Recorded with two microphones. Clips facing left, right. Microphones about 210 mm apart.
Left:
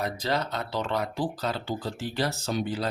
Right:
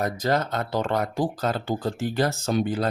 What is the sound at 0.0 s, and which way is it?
Speech, 45° right (ahead or behind).